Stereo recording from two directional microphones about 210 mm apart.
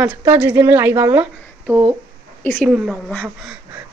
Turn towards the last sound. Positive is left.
turn(degrees=0)  # may be behind; listen again after turning